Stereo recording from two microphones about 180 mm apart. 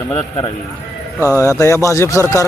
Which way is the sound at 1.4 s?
15° left (ahead or behind).